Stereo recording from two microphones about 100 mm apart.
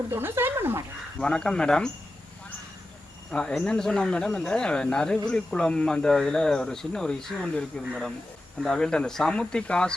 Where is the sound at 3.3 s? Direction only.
10° left (ahead or behind).